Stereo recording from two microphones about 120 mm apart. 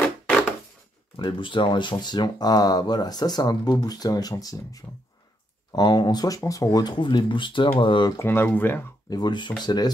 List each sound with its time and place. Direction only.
1.1 s speech: 40° left (ahead or behind)
8.2 s speech: 20° left (ahead or behind)
9.1 s speech: 40° left (ahead or behind)